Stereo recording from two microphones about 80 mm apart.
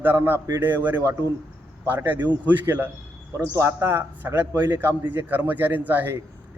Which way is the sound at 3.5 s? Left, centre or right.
Right.